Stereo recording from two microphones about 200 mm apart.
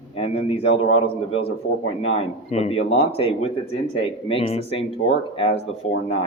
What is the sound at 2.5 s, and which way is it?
Speech, 30° left (ahead or behind).